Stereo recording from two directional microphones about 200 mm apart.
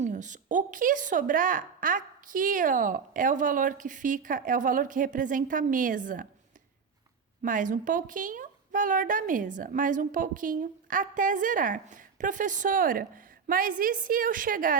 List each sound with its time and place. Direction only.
0.0 s a woman's voice: 40° right (ahead or behind)
7.4 s a woman's voice: 40° right (ahead or behind)